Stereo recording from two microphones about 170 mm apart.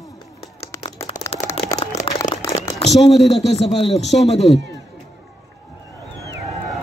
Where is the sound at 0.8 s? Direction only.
35° left (ahead or behind).